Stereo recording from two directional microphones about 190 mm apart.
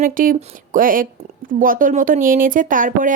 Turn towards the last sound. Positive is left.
turn(degrees=-45)  # may be behind; listen again after turning